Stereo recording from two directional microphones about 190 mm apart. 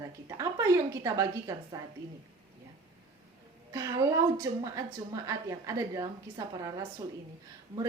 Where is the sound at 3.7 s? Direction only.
15° right (ahead or behind).